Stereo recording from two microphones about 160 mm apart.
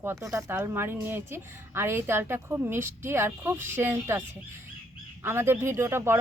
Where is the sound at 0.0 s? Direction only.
15° right (ahead or behind).